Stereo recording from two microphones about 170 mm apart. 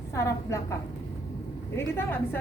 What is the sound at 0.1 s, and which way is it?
Speech, 15° left (ahead or behind).